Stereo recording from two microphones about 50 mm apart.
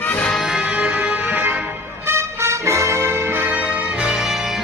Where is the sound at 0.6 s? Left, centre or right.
Right.